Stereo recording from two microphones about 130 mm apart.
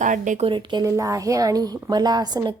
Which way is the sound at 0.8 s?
25° right (ahead or behind).